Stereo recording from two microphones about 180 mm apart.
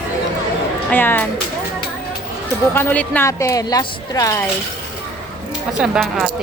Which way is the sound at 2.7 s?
10° left (ahead or behind).